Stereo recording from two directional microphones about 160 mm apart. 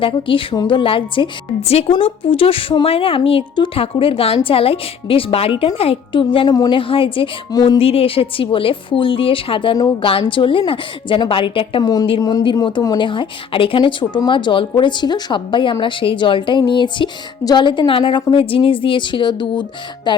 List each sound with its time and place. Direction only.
0.0 s a woman's voice: 35° left (ahead or behind)